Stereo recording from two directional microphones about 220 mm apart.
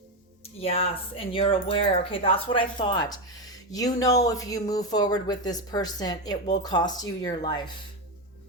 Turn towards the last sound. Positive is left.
turn(degrees=20)  # may be behind; listen again after turning